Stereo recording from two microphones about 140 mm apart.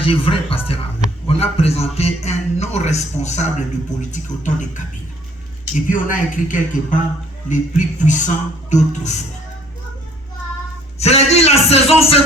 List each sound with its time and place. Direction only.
0.0 s a man's voice: 40° left (ahead or behind); by 4.8 s 60° left (ahead or behind)
5.9 s speech: 70° left (ahead or behind)
11.0 s a man's voice: 50° left (ahead or behind)